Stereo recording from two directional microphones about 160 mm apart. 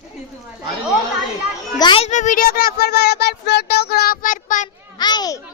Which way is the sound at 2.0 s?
50° left (ahead or behind).